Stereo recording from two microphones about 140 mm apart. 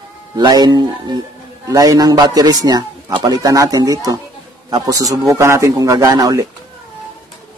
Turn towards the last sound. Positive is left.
turn(degrees=-25)  # may be behind; listen again after turning